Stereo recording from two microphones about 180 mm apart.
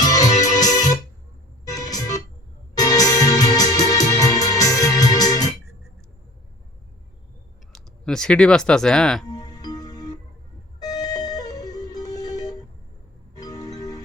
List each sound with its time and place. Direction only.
0.0 s music: 20° left (ahead or behind)
1.6 s organ: 20° left (ahead or behind)
2.7 s music: 20° left (ahead or behind)
7.7 s speech: 5° left (ahead or behind)
9.2 s music: 20° left (ahead or behind)